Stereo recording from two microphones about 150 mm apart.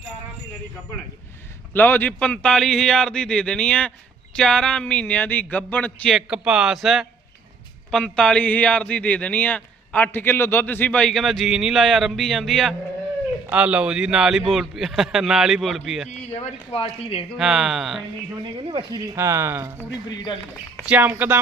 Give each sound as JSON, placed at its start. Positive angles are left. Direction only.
{"t": 1.7, "sound": "a man's voice", "side_deg": 10}
{"t": 13.5, "sound": "a man's voice", "side_deg": -10}
{"t": 16.0, "sound": "speech", "side_deg": 50}
{"t": 17.3, "sound": "a man's voice", "side_deg": -5}
{"t": 18.5, "sound": "speech", "side_deg": -35}
{"t": 20.8, "sound": "speech", "side_deg": -10}